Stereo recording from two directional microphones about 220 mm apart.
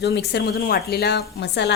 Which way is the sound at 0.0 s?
50° left (ahead or behind).